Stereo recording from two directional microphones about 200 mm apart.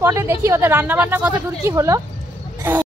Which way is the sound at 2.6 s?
10° right (ahead or behind).